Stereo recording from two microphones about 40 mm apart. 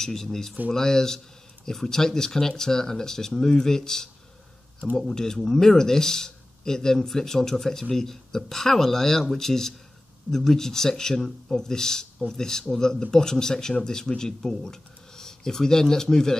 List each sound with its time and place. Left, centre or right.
0.0 s speech: centre